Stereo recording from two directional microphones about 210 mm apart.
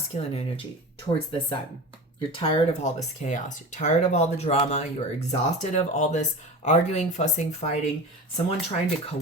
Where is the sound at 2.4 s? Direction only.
35° left (ahead or behind).